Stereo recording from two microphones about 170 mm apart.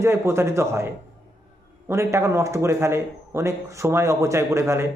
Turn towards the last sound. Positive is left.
turn(degrees=-15)  # may be behind; listen again after turning